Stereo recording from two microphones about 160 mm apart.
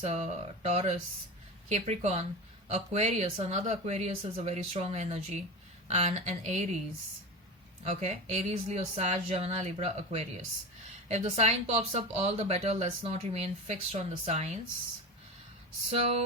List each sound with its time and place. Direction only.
0.0 s speech: 40° right (ahead or behind)
7.9 s speech: 45° right (ahead or behind)